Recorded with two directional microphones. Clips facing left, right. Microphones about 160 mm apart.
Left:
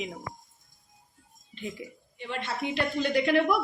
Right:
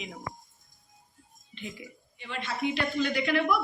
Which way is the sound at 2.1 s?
55° left (ahead or behind).